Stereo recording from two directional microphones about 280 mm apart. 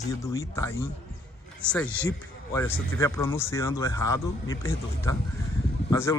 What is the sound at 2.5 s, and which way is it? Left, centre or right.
Speech, centre.